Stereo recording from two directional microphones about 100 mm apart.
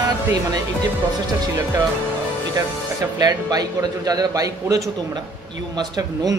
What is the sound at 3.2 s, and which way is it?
A man's voice, 45° right (ahead or behind).